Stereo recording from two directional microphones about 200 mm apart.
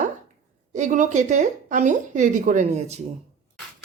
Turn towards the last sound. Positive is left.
turn(degrees=-35)  # may be behind; listen again after turning